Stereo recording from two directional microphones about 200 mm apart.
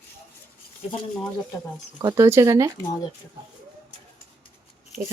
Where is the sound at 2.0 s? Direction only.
15° right (ahead or behind).